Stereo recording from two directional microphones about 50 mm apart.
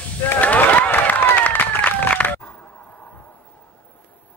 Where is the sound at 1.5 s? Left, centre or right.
Left.